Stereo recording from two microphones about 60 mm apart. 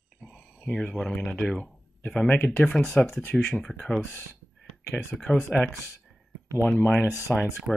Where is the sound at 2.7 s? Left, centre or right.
Centre.